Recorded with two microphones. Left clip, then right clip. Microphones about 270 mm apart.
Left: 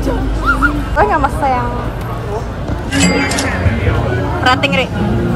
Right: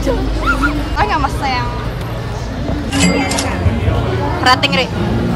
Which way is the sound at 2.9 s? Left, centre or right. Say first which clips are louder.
Left 2 dB; centre.